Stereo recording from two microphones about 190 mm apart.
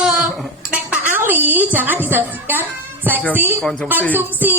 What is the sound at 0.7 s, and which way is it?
Dishes, 10° right (ahead or behind).